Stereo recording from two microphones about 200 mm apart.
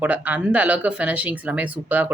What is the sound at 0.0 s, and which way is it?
Speech, 5° right (ahead or behind).